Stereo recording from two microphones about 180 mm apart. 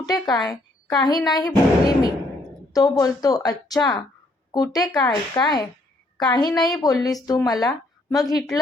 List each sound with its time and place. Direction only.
0.0 s speech: 20° left (ahead or behind)